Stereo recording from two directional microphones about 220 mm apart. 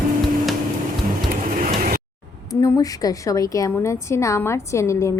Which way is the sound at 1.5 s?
40° right (ahead or behind).